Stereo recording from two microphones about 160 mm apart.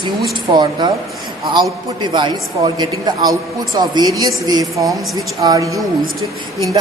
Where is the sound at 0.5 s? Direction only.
25° right (ahead or behind).